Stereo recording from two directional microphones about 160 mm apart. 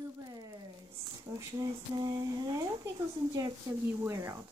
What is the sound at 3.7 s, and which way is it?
Speech, 20° right (ahead or behind).